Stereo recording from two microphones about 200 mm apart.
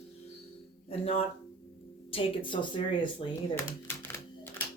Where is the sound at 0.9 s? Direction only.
30° left (ahead or behind).